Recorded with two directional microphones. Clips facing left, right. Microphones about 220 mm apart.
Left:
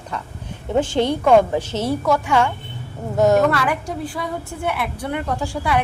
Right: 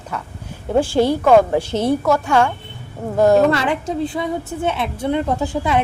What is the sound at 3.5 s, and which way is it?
A woman's voice, 25° right (ahead or behind).